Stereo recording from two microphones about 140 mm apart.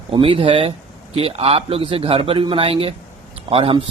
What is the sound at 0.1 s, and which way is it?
Speech, 40° right (ahead or behind).